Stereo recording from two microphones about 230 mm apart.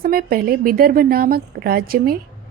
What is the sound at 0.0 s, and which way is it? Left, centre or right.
A woman's voice, right.